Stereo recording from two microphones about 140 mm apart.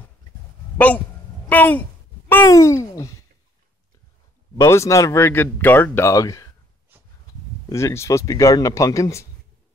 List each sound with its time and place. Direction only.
0.7 s a man's voice: 10° left (ahead or behind)
1.5 s a sound: 10° left (ahead or behind)
4.6 s speech: 20° left (ahead or behind)
7.7 s speech: 20° left (ahead or behind)